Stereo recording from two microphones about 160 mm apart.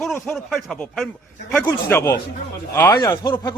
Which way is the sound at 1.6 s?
15° left (ahead or behind).